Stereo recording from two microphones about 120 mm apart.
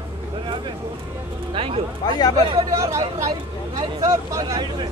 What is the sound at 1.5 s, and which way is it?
Speech, 50° right (ahead or behind).